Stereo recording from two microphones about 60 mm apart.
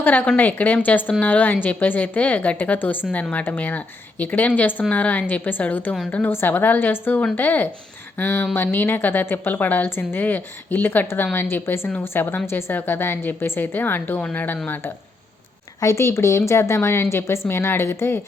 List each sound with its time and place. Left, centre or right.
0.0 s a woman's voice: left
15.8 s a woman's voice: left